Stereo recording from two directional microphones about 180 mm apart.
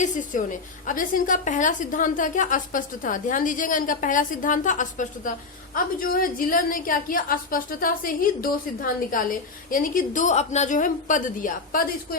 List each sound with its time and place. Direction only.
0.0 s a woman's voice: 45° left (ahead or behind)